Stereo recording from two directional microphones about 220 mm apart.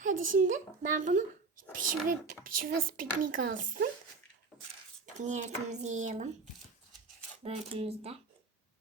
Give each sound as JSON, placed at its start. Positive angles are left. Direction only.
{"t": 0.0, "sound": "a child's voice", "side_deg": -35}
{"t": 5.0, "sound": "speech", "side_deg": -35}
{"t": 7.4, "sound": "speech", "side_deg": -25}